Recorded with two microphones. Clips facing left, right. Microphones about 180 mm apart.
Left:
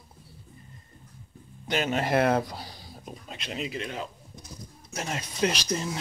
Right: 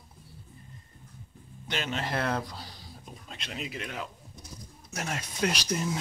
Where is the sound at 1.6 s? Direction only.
45° left (ahead or behind).